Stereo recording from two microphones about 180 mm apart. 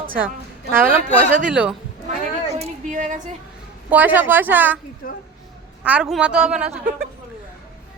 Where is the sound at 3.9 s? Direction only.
10° right (ahead or behind).